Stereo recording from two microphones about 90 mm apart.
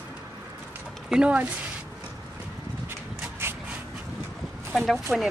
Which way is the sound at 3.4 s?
25° right (ahead or behind).